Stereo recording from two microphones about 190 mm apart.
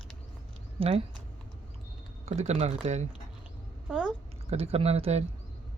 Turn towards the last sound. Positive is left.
turn(degrees=-35)  # may be behind; listen again after turning